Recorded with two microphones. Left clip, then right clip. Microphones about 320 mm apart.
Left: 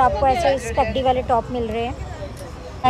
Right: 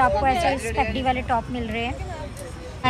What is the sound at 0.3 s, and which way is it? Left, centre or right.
Speech, centre.